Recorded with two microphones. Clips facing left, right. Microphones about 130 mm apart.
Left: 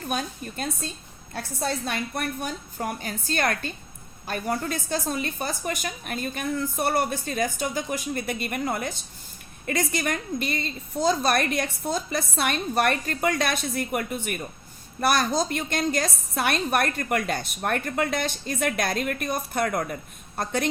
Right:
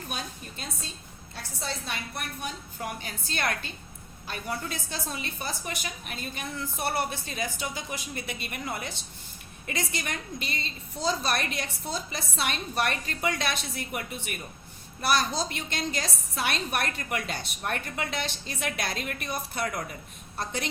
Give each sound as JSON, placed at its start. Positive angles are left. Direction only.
{"t": 0.1, "sound": "a woman's voice", "side_deg": 50}